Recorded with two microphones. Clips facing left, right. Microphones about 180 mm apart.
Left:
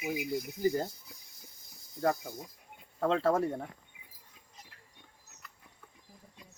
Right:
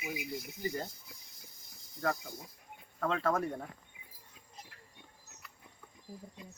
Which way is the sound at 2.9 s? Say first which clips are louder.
Left 4 dB; 30° left (ahead or behind).